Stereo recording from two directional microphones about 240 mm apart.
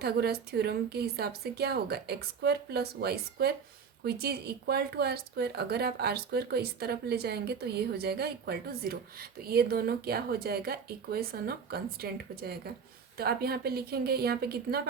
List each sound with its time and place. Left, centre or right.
0.0 s speech: right